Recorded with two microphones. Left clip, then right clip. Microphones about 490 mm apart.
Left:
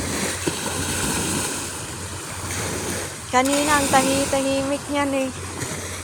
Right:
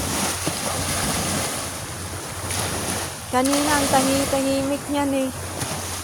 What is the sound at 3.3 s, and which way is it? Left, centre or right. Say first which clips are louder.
Speech: left 2 dB; right.